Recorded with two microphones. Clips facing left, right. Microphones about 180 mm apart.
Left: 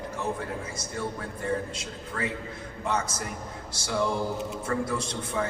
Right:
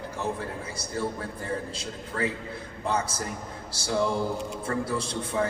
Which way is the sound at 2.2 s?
30° right (ahead or behind).